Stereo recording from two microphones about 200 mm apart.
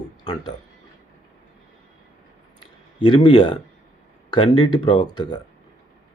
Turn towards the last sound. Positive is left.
turn(degrees=25)  # may be behind; listen again after turning